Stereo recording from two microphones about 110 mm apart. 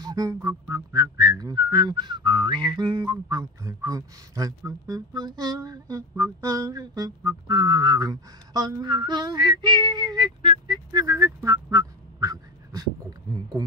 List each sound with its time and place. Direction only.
0.0 s whistling: 35° right (ahead or behind)
10.9 s quack: 30° right (ahead or behind)